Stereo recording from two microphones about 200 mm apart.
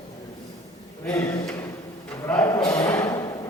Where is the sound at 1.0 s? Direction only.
10° left (ahead or behind).